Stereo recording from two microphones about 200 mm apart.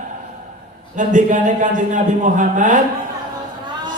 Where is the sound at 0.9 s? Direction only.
40° right (ahead or behind).